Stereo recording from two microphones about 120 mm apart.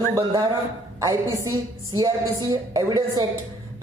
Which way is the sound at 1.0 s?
30° right (ahead or behind).